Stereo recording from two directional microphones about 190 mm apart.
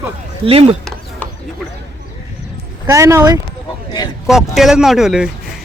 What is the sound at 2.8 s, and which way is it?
Speech, 15° right (ahead or behind).